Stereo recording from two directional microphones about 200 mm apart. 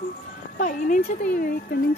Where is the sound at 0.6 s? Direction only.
45° left (ahead or behind).